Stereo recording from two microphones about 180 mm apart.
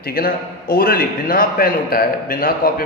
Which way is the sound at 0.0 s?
55° left (ahead or behind).